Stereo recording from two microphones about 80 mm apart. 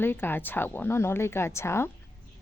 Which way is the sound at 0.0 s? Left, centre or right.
Left.